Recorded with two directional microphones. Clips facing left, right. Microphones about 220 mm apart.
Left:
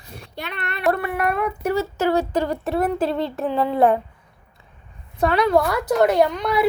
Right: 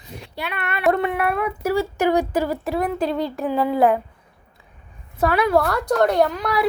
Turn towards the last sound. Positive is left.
turn(degrees=0)  # may be behind; listen again after turning